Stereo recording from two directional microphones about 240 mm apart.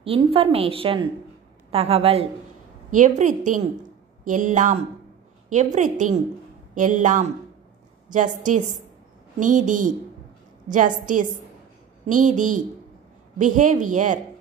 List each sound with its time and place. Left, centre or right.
0.0 s a woman's voice: right